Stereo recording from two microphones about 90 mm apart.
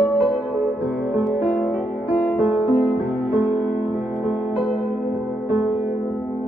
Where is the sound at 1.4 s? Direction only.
15° left (ahead or behind).